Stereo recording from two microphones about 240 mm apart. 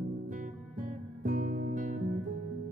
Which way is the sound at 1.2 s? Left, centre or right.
Right.